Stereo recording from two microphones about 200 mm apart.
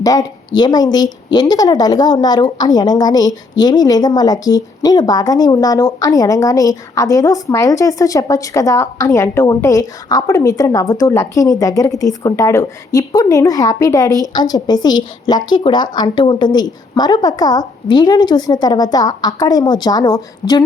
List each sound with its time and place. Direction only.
0.0 s a woman's voice: 20° left (ahead or behind)